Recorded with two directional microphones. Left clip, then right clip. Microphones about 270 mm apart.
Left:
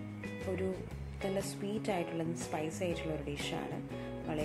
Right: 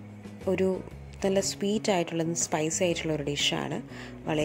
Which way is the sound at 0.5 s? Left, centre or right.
Right.